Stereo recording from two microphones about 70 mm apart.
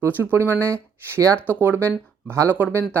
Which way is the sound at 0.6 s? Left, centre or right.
Right.